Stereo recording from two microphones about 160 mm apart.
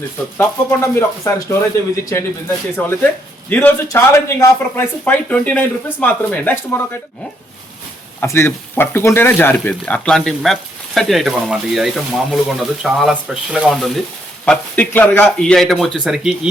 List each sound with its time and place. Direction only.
0.3 s speech: 15° left (ahead or behind)
8.2 s speech: 15° left (ahead or behind); by 16.5 s 5° right (ahead or behind)